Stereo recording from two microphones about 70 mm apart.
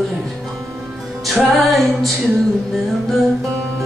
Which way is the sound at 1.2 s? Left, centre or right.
Centre.